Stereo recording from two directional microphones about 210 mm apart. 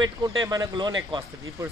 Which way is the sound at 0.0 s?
20° right (ahead or behind).